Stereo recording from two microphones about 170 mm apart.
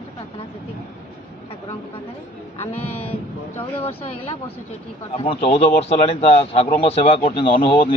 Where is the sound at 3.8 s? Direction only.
35° left (ahead or behind).